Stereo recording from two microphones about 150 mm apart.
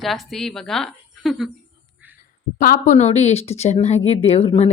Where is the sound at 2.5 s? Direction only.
65° left (ahead or behind).